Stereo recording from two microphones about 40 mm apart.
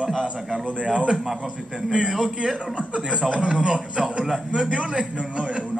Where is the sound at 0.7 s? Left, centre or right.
Right.